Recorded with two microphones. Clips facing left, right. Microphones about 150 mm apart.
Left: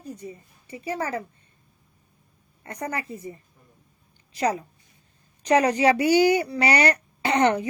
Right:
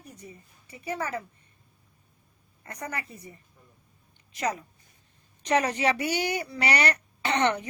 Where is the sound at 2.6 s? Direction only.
30° left (ahead or behind).